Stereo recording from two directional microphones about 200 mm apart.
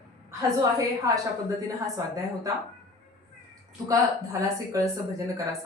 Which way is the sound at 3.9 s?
15° right (ahead or behind).